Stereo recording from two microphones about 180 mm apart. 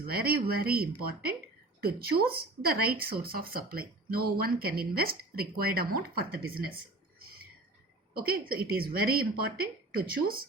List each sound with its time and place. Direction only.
0.1 s speech: 55° right (ahead or behind)
8.1 s speech: 55° right (ahead or behind)